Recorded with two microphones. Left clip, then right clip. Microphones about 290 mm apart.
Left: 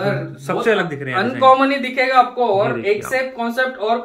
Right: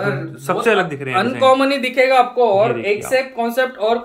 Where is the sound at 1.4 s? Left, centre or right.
Right.